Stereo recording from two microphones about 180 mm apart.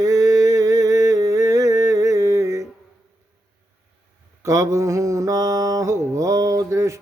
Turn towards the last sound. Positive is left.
turn(degrees=-15)  # may be behind; listen again after turning